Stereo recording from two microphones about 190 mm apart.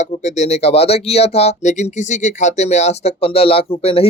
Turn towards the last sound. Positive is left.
turn(degrees=30)  # may be behind; listen again after turning